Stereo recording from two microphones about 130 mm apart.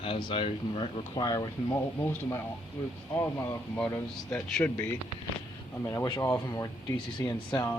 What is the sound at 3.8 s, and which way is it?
Speech, 25° left (ahead or behind).